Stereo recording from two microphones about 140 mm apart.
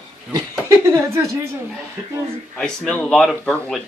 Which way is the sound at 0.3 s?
20° right (ahead or behind).